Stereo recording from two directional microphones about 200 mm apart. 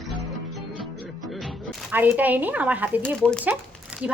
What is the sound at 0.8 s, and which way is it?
Music, centre (ahead or behind).